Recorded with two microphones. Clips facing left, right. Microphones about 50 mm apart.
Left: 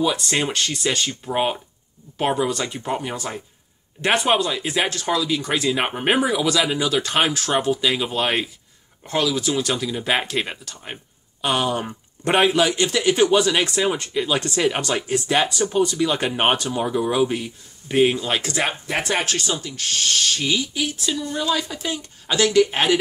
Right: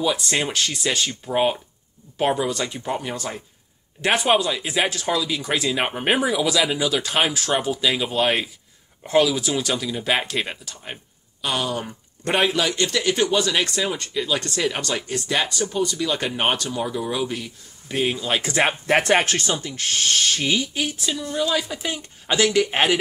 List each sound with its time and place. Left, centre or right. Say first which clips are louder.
0.0 s speech: left 1 dB; centre
11.4 s speech: left 3 dB; left
12.4 s speech: left 3 dB; centre
18.4 s speech: right 3 dB; right
18.9 s speech: right 5 dB; right
21.0 s speech: even; centre